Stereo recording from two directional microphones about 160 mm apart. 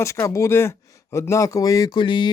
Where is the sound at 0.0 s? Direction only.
20° left (ahead or behind).